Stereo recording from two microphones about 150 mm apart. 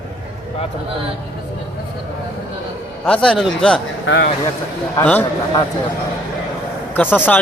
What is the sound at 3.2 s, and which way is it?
Speech, centre (ahead or behind).